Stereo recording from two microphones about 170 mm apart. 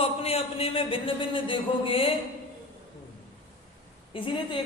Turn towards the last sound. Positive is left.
turn(degrees=30)  # may be behind; listen again after turning